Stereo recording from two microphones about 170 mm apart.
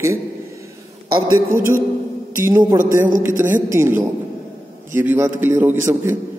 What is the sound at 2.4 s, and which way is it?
A man's voice, 15° right (ahead or behind).